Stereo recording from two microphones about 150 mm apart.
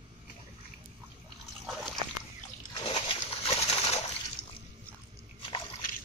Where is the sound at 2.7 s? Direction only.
30° left (ahead or behind).